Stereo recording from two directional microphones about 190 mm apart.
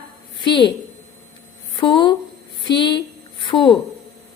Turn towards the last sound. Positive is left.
turn(degrees=25)  # may be behind; listen again after turning